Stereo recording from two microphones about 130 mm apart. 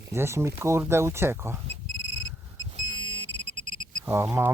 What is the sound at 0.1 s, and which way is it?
Speech, 20° right (ahead or behind).